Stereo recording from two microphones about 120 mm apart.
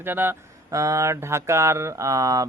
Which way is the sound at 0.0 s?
15° right (ahead or behind).